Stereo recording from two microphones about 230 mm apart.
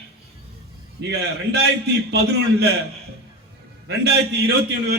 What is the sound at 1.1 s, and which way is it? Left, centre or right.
A man's voice, right.